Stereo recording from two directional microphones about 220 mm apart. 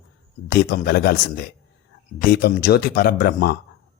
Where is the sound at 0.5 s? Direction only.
50° left (ahead or behind).